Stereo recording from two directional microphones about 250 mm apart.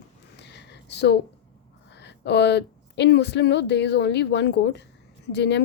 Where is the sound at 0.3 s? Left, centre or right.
Left.